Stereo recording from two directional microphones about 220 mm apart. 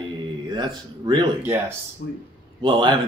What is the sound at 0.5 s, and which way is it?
Speech, 20° right (ahead or behind).